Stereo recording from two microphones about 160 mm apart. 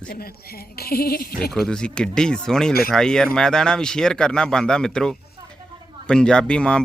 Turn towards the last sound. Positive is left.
turn(degrees=5)  # may be behind; listen again after turning